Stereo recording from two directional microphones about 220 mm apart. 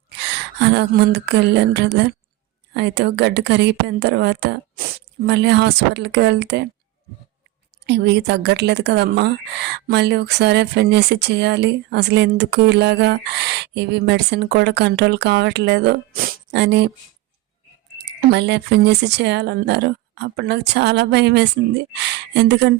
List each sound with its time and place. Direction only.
0.6 s speech: 50° right (ahead or behind)
7.9 s speech: 50° right (ahead or behind)
18.0 s speech: 50° right (ahead or behind)